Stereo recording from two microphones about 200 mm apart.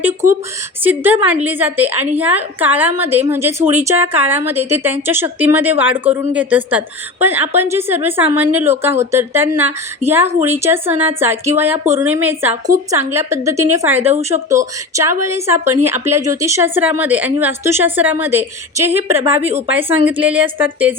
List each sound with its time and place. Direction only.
0.0 s a woman's voice: 15° right (ahead or behind)